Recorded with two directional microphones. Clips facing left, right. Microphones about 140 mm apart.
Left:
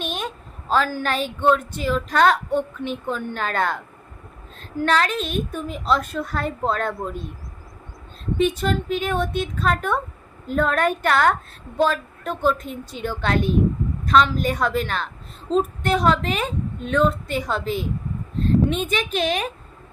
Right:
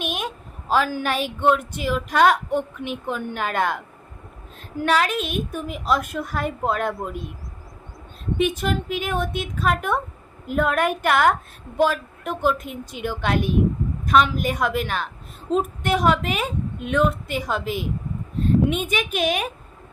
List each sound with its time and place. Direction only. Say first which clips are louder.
0.0 s a woman's voice: even; 10° right (ahead or behind)
4.8 s a woman's voice: even; 10° right (ahead or behind)
8.4 s a woman's voice: left 2 dB; 10° right (ahead or behind)